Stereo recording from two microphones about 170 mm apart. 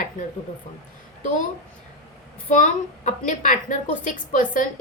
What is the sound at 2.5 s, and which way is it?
A woman's voice, 45° left (ahead or behind).